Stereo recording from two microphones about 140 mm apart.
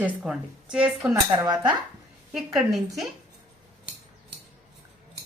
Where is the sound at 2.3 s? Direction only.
Centre (ahead or behind).